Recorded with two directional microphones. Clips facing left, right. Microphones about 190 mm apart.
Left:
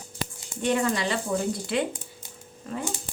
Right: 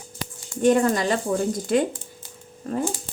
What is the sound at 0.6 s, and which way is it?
Speech, 45° right (ahead or behind).